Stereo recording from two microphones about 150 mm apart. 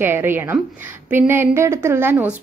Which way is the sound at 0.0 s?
15° right (ahead or behind).